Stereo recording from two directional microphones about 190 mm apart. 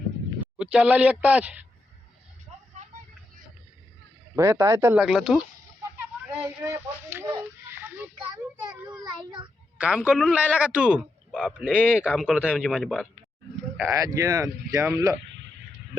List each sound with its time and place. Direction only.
0.6 s speech: 5° right (ahead or behind)
4.4 s speech: 15° right (ahead or behind)
6.6 s speech: 15° right (ahead or behind)
8.7 s a sound: 5° right (ahead or behind)
9.7 s a man's voice: 5° right (ahead or behind)
13.7 s speech: 15° right (ahead or behind)